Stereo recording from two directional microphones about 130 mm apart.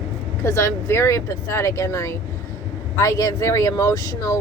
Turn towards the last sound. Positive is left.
turn(degrees=25)  # may be behind; listen again after turning